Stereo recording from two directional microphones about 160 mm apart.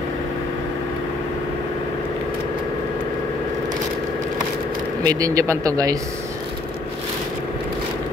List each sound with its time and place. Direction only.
5.0 s speech: 20° right (ahead or behind)